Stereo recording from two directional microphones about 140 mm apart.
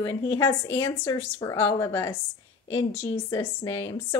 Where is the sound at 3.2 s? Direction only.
20° left (ahead or behind).